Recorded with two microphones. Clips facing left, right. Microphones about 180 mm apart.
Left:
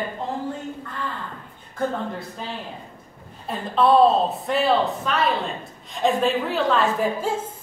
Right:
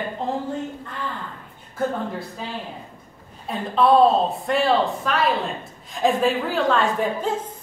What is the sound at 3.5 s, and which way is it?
A woman's voice, centre (ahead or behind).